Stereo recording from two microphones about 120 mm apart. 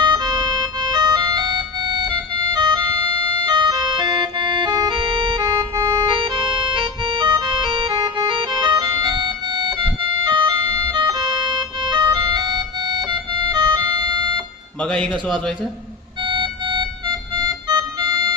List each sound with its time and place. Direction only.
0.0 s music: 40° right (ahead or behind)
14.8 s a man's voice: 5° left (ahead or behind)
16.2 s music: 45° right (ahead or behind)